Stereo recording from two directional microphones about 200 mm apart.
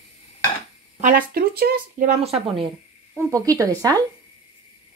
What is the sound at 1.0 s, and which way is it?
Speech, 45° right (ahead or behind).